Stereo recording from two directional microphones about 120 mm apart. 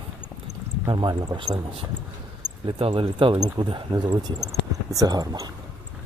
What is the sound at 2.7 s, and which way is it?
Speech, 50° right (ahead or behind).